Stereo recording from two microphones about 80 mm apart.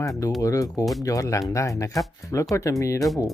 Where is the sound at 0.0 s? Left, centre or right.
Left.